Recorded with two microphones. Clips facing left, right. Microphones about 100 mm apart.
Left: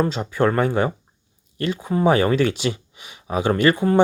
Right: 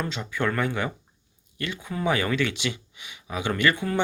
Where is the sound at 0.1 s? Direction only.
40° left (ahead or behind).